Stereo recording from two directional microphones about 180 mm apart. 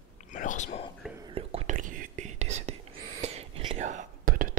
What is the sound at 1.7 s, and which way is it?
Whispering, 50° right (ahead or behind).